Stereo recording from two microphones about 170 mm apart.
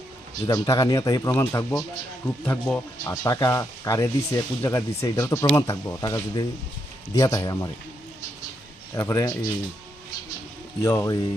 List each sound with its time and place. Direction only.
0.4 s speech: 20° left (ahead or behind)
9.0 s speech: 20° left (ahead or behind)
10.8 s speech: 15° left (ahead or behind)